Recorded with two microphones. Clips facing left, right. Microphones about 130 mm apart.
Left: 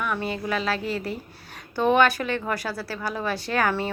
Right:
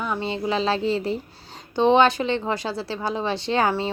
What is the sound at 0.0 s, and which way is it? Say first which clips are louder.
A woman's voice: right 2 dB; 25° right (ahead or behind).